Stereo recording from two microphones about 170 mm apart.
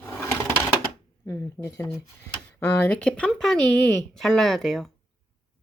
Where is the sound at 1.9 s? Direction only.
10° left (ahead or behind).